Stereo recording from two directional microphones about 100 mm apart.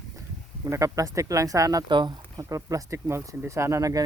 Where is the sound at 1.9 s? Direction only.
50° right (ahead or behind).